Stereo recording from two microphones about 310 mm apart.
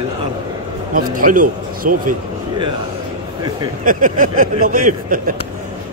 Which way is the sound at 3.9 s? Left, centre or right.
Right.